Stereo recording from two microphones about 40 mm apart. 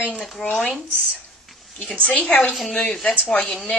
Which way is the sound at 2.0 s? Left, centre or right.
Left.